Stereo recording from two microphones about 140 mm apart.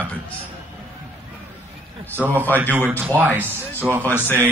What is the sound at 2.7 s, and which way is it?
Speech, 15° right (ahead or behind).